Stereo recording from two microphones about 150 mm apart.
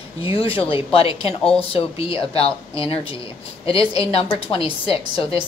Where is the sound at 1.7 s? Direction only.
40° left (ahead or behind).